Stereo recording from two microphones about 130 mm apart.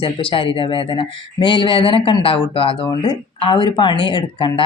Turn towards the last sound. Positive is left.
turn(degrees=40)  # may be behind; listen again after turning